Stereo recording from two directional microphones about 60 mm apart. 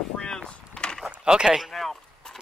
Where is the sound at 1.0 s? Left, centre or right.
Centre.